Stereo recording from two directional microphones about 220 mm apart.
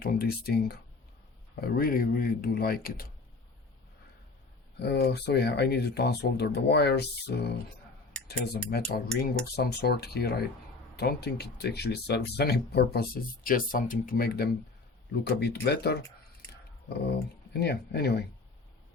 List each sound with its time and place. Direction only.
0.0 s speech: 45° left (ahead or behind)
4.8 s speech: 50° left (ahead or behind)
8.9 s speech: 45° left (ahead or behind)
17.5 s speech: 50° left (ahead or behind)